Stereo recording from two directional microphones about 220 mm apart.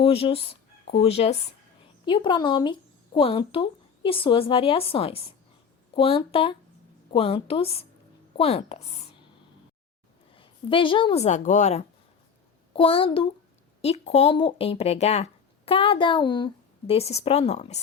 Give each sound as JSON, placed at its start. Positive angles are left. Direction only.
{"t": 0.0, "sound": "speech", "side_deg": 25}
{"t": 10.3, "sound": "a woman's voice", "side_deg": 25}